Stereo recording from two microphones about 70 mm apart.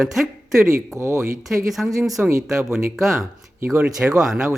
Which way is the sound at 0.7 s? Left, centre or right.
Right.